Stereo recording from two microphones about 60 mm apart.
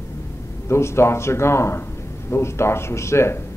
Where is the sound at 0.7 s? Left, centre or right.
Left.